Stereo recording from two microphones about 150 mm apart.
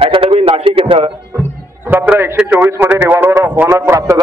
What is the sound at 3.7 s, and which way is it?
Speech, 20° right (ahead or behind).